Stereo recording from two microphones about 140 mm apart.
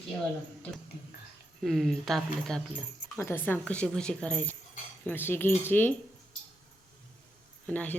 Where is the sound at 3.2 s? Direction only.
15° left (ahead or behind).